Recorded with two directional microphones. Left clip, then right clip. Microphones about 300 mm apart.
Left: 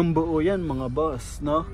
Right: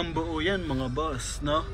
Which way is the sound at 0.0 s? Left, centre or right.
Centre.